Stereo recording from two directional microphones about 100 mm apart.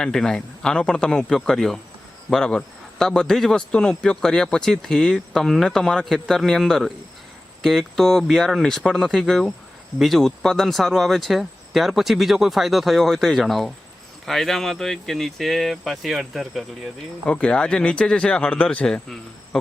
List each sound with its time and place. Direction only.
0.0 s a man's voice: 5° left (ahead or behind)